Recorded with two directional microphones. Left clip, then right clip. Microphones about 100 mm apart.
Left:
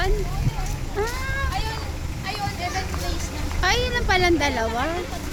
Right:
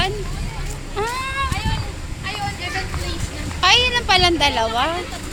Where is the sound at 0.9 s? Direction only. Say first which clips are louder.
Right 4 dB; 15° left (ahead or behind).